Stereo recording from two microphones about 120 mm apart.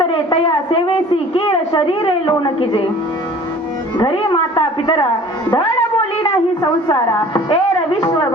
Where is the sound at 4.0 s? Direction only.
40° left (ahead or behind).